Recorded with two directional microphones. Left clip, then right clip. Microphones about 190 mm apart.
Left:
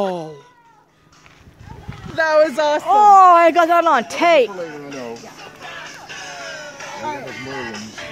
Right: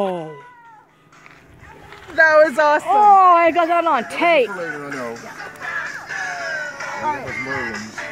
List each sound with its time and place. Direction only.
0.0 s cat: 15° left (ahead or behind)
2.1 s speech: 25° left (ahead or behind)
2.4 s speech: 10° left (ahead or behind)
5.4 s music: 25° left (ahead or behind)
6.0 s music: 50° left (ahead or behind)
6.3 s a sound: 35° left (ahead or behind)
7.0 s music: centre (ahead or behind)
7.2 s music: 30° left (ahead or behind)